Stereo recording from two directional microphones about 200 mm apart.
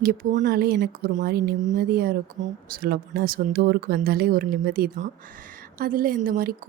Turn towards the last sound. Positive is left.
turn(degrees=-45)  # may be behind; listen again after turning